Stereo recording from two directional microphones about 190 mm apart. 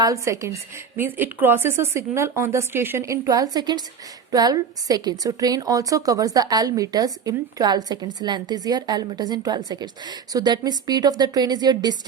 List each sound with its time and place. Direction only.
0.0 s a woman's voice: 15° right (ahead or behind)